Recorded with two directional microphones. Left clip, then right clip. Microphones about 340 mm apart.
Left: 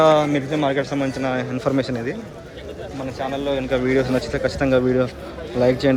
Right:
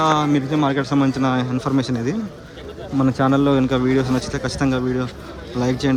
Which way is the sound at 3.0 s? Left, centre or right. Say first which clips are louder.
Right 8 dB; right.